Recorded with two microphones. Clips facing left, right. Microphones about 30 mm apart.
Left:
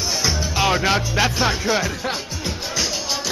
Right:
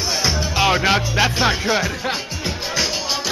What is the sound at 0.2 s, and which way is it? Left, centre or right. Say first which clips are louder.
Music: right 2 dB; centre.